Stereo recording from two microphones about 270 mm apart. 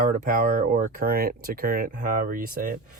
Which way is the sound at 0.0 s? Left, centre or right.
Right.